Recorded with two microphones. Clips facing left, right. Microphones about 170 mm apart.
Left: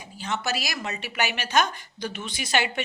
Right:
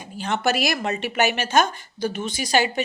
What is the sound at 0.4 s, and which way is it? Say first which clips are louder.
A woman's voice: right 8 dB; 55° right (ahead or behind).